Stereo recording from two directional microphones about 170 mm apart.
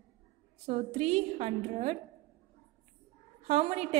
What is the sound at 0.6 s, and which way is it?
A woman's voice, 40° right (ahead or behind).